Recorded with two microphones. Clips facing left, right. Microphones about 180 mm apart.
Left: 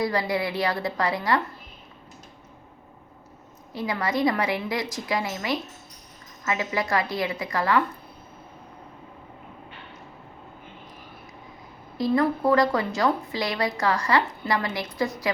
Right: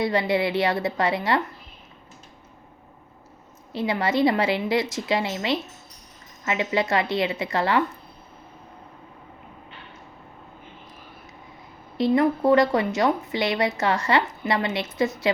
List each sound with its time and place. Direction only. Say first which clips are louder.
0.0 s speech: right 3 dB; 25° right (ahead or behind)
3.7 s speech: right 3 dB; 25° right (ahead or behind)
11.9 s speech: right 2 dB; 25° right (ahead or behind)